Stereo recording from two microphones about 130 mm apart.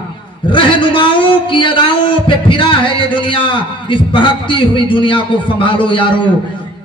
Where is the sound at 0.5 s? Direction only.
40° left (ahead or behind).